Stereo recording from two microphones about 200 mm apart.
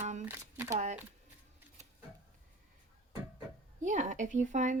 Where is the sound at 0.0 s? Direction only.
35° right (ahead or behind).